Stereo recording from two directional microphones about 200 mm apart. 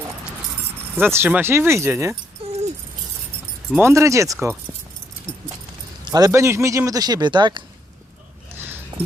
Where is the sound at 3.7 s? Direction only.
10° right (ahead or behind).